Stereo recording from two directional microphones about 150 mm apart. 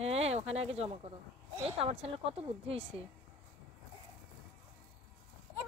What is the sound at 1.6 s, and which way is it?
A woman's voice, 40° right (ahead or behind).